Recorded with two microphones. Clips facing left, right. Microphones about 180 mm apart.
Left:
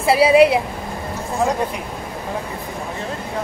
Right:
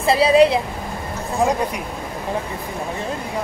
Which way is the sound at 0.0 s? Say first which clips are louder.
Left 1 dB; 10° left (ahead or behind).